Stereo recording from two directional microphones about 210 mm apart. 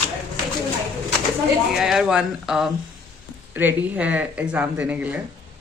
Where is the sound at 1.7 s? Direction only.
Centre (ahead or behind).